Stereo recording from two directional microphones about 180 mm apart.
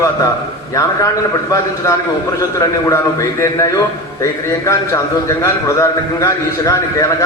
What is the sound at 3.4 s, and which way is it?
A man's voice, 15° left (ahead or behind).